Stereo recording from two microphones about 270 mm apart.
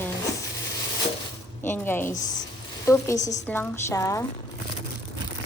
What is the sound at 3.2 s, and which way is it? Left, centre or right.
Speech, left.